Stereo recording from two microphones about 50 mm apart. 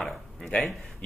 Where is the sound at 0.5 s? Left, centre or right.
Left.